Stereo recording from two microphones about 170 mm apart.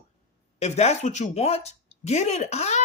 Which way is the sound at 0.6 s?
40° left (ahead or behind).